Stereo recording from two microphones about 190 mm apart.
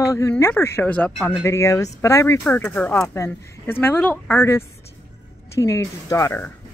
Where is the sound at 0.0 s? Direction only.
15° left (ahead or behind).